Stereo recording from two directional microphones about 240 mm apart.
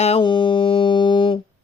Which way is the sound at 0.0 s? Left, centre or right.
Left.